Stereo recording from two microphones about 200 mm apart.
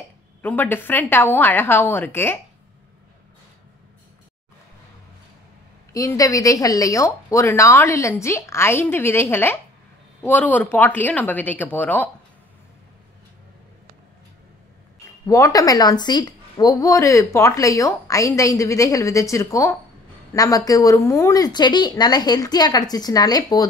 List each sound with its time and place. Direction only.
0.4 s a woman's voice: 10° left (ahead or behind)
5.9 s a woman's voice: 15° left (ahead or behind)
15.2 s a woman's voice: 15° left (ahead or behind)